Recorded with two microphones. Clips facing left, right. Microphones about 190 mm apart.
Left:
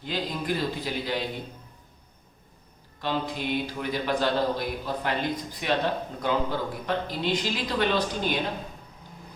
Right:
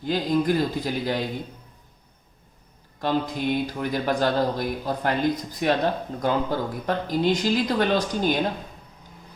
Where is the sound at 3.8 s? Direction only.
45° right (ahead or behind).